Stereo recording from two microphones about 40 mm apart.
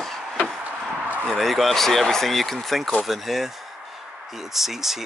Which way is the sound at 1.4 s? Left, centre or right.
Centre.